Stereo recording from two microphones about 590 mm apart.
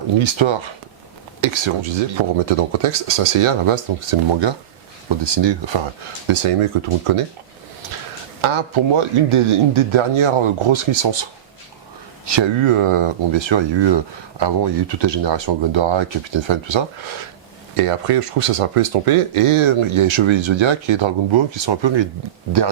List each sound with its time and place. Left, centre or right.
0.2 s speech: right
2.5 s speech: right
6.2 s speech: right
8.4 s speech: right
17.7 s speech: right